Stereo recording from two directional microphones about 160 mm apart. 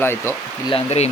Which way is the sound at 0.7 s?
40° left (ahead or behind).